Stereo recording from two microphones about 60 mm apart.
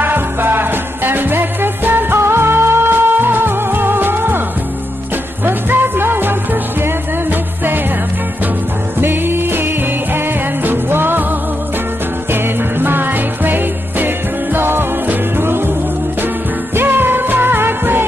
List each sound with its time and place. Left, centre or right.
0.0 s music: right
5.4 s music: right
9.0 s music: right
16.7 s music: right